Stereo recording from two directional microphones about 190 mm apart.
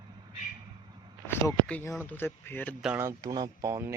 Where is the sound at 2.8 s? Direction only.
5° right (ahead or behind).